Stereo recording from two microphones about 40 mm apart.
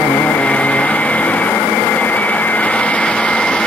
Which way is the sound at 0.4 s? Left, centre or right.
Left.